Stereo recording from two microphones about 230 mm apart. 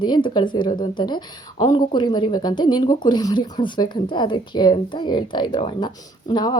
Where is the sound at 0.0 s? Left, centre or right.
Centre.